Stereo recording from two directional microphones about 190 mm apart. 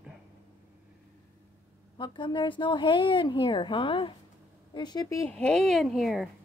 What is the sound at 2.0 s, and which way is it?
A woman's voice, 25° left (ahead or behind).